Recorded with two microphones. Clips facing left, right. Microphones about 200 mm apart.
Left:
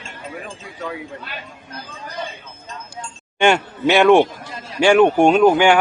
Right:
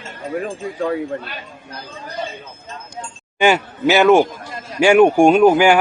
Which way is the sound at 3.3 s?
5° right (ahead or behind).